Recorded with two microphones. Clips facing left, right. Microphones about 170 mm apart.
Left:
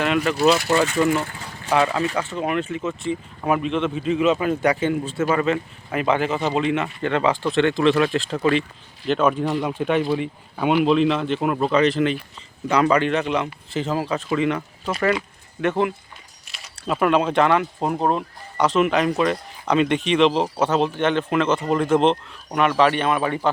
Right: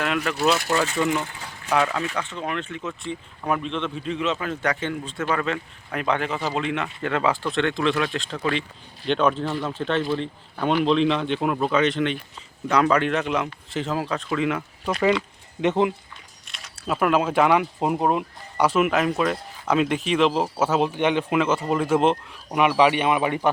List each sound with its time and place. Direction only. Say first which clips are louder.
0.0 s speech: left 4 dB; centre (ahead or behind)
15.6 s speech: even; 20° right (ahead or behind)
16.5 s speech: left 2 dB; centre (ahead or behind); by 23.5 s 15° right (ahead or behind)